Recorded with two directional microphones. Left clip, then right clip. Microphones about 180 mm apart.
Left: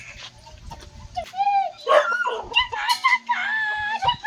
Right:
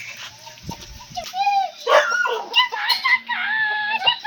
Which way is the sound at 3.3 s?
10° left (ahead or behind).